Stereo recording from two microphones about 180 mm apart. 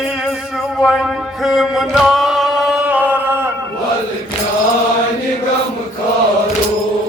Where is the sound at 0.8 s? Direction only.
Centre (ahead or behind).